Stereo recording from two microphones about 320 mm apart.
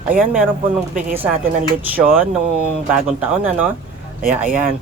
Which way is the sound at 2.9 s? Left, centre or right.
Centre.